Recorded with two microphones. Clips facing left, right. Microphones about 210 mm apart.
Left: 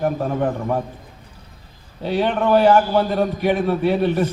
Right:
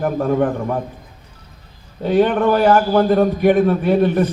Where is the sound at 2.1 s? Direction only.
50° right (ahead or behind).